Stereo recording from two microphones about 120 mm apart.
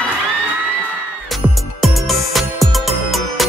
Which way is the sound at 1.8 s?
Centre (ahead or behind).